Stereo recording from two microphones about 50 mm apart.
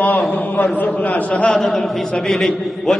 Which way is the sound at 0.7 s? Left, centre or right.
Left.